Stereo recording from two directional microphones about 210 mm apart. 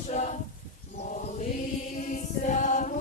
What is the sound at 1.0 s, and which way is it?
Mantra, 35° left (ahead or behind).